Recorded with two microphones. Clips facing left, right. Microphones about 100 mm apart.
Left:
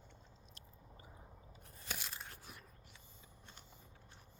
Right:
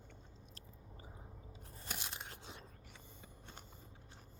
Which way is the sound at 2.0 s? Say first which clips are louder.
Right 2 dB; 20° right (ahead or behind).